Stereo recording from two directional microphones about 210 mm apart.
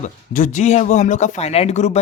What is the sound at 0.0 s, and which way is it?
A man's voice, 35° left (ahead or behind).